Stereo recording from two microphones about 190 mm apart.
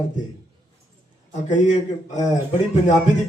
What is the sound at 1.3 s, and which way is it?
A man's voice, 40° left (ahead or behind).